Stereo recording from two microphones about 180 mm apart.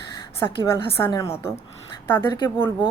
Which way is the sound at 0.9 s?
15° left (ahead or behind).